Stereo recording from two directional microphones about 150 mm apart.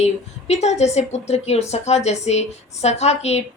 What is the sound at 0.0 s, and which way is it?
Speech, 45° left (ahead or behind).